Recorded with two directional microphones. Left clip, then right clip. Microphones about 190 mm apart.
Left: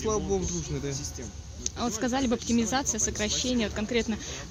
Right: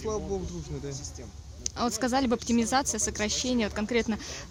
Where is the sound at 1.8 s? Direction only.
35° right (ahead or behind).